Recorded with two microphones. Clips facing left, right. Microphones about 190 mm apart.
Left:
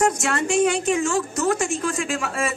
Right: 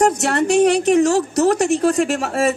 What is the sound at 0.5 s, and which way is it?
A woman's voice, 65° right (ahead or behind).